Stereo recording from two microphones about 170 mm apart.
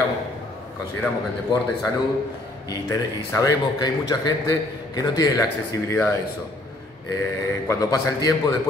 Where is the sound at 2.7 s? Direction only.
20° left (ahead or behind).